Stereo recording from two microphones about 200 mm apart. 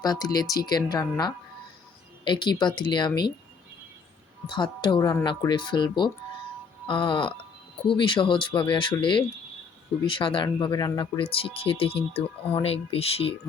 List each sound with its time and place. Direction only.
0.0 s speech: 20° left (ahead or behind)
4.4 s speech: 25° left (ahead or behind)